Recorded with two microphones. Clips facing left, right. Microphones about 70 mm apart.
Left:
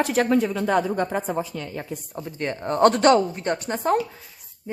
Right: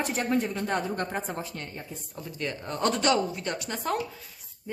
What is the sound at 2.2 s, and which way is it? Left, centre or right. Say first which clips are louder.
A woman's voice: left 5 dB; left.